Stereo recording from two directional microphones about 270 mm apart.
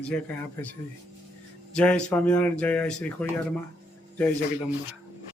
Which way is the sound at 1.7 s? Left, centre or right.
Centre.